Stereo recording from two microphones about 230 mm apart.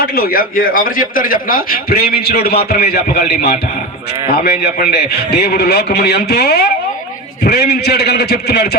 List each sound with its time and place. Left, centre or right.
0.0 s a man's voice: left